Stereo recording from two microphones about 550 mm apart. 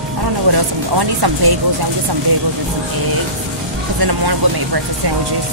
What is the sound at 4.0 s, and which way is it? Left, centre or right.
Speech, right.